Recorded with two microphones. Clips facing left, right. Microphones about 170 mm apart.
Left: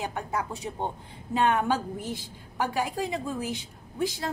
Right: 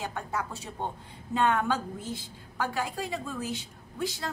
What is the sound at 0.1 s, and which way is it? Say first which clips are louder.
A woman's voice: left 3 dB; 15° left (ahead or behind).